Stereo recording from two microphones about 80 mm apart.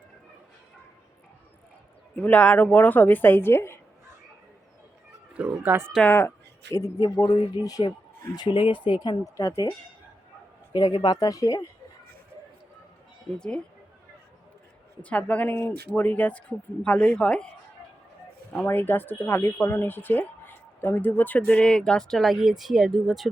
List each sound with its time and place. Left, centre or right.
2.1 s speech: centre
5.3 s a sound: centre
5.6 s speech: right
6.1 s speech: left
6.7 s speech: left
8.4 s speech: left
9.0 s speech: left
10.7 s speech: left
15.1 s speech: centre
18.7 s speech: left; by 23.3 s centre